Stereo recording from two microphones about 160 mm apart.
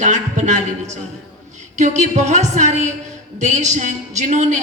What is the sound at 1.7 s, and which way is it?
A woman's voice, 45° right (ahead or behind).